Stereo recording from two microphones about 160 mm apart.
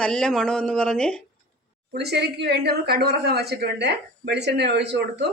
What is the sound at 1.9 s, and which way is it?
Speech, 90° right.